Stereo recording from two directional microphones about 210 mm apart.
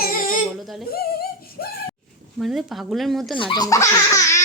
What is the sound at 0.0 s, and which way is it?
Baby cry, 40° left (ahead or behind).